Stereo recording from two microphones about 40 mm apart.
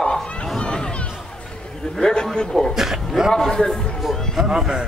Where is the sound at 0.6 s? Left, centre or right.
Left.